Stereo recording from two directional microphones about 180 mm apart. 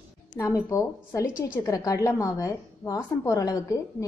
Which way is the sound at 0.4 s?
15° left (ahead or behind).